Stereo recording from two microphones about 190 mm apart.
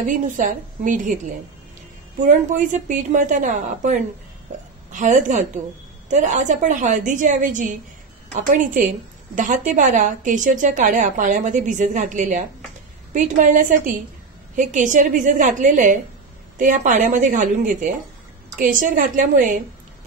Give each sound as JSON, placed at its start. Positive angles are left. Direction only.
{"t": 0.0, "sound": "a woman's voice", "side_deg": -45}
{"t": 2.2, "sound": "a woman's voice", "side_deg": -40}